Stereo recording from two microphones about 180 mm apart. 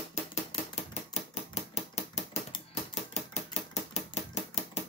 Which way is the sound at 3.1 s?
35° left (ahead or behind).